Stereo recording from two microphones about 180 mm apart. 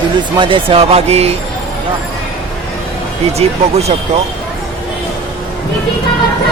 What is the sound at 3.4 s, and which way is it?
Speech, 35° right (ahead or behind).